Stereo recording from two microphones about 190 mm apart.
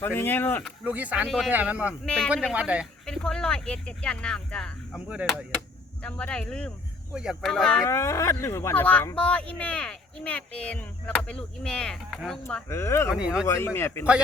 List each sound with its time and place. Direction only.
0.0 s speech: 10° left (ahead or behind)
0.9 s speech: 5° right (ahead or behind)
2.0 s speech: 5° left (ahead or behind)
6.0 s speech: 5° left (ahead or behind)
7.9 s speech: 15° left (ahead or behind)
12.6 s speech: 15° left (ahead or behind)
13.1 s speech: 5° right (ahead or behind)
13.5 s speech: 15° left (ahead or behind)